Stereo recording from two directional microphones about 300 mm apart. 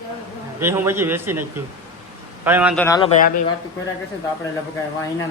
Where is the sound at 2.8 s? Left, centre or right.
Centre.